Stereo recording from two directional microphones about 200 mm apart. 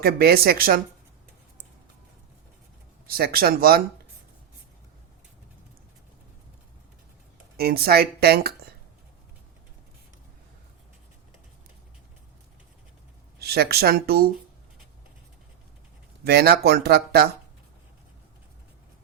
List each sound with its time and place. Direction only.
0.0 s speech: 50° right (ahead or behind)
3.1 s speech: 50° right (ahead or behind)
7.5 s speech: 50° right (ahead or behind)
13.4 s speech: 50° right (ahead or behind)
16.2 s speech: 55° right (ahead or behind)